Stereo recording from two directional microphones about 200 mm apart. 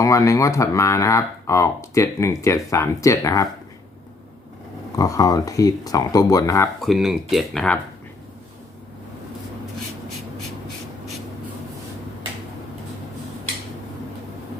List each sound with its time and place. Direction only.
0.0 s speech: 15° left (ahead or behind)
4.9 s speech: 15° left (ahead or behind)
6.8 s speech: centre (ahead or behind)